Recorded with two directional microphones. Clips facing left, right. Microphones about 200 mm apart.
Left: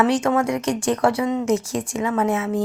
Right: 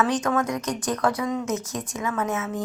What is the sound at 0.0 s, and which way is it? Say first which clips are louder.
Speech: left 4 dB; 25° left (ahead or behind).